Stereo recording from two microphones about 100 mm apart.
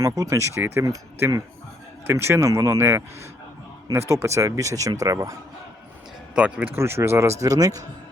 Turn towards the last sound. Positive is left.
turn(degrees=-35)  # may be behind; listen again after turning